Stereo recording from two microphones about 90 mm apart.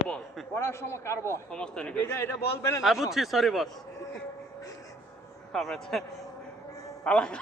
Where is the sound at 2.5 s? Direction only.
30° left (ahead or behind).